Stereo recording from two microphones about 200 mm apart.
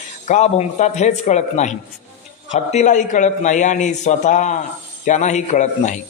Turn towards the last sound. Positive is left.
turn(degrees=35)  # may be behind; listen again after turning